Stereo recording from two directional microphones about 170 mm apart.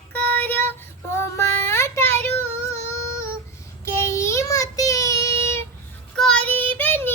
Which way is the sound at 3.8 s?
15° left (ahead or behind).